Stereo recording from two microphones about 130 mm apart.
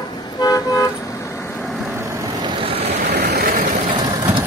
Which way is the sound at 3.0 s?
90° right.